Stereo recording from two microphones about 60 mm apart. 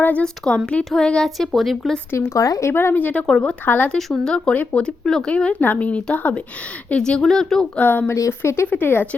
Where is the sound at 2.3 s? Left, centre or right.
Left.